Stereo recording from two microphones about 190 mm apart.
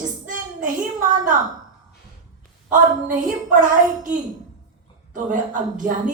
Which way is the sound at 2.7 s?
45° right (ahead or behind).